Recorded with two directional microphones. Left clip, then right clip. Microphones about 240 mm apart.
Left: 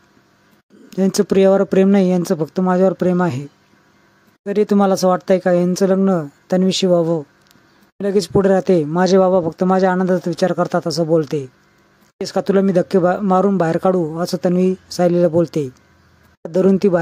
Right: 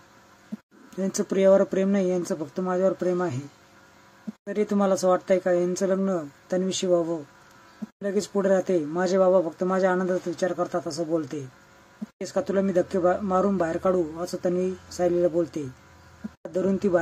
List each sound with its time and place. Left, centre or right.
0.8 s speech: left
4.5 s speech: left